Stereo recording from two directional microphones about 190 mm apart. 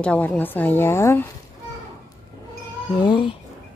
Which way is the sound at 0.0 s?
5° left (ahead or behind).